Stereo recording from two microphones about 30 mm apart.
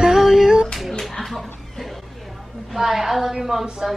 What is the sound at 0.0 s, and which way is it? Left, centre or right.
Female singing, centre.